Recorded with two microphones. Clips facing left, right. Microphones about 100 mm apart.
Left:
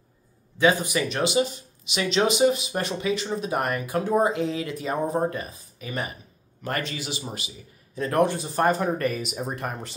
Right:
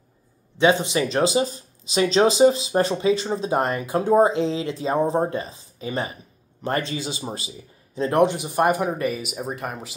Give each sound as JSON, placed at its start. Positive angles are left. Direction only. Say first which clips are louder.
{"t": 0.6, "sound": "speech", "louder": "right 3 dB", "side_deg": -25}